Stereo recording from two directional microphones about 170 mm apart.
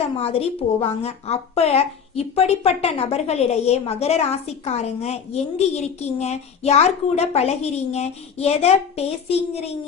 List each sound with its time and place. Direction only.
0.0 s a woman's voice: 35° left (ahead or behind)